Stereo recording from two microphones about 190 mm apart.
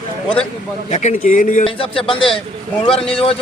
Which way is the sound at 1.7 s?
30° left (ahead or behind).